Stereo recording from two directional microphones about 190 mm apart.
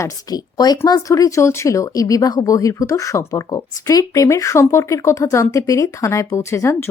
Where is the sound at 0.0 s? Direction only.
20° left (ahead or behind).